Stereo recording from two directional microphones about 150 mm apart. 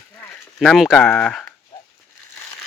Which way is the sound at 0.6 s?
Centre (ahead or behind).